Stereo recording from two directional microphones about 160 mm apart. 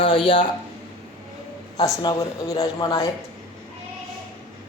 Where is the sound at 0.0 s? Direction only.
35° left (ahead or behind).